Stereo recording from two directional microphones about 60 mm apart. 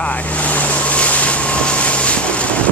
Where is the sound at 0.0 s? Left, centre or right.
Left.